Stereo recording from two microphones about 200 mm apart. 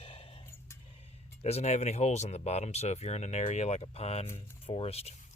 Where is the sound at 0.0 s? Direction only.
25° left (ahead or behind).